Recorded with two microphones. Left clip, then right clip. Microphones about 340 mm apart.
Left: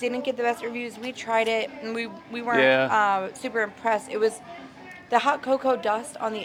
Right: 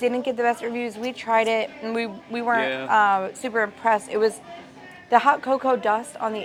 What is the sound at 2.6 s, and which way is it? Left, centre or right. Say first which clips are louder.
Speech: left 5 dB; left.